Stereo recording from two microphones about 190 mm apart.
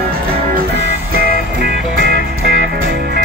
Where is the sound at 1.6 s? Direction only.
60° right (ahead or behind).